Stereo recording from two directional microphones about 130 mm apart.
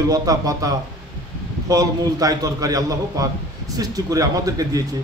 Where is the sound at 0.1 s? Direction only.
25° right (ahead or behind).